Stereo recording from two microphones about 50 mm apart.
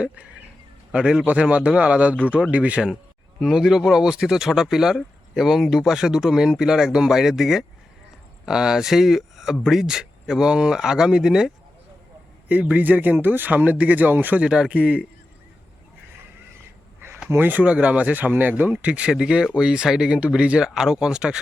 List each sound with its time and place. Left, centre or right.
0.9 s a man's voice: centre
3.4 s speech: centre
12.5 s speech: right
14.4 s a man's voice: centre
17.2 s speech: right
17.5 s speech: right
18.7 s a man's voice: right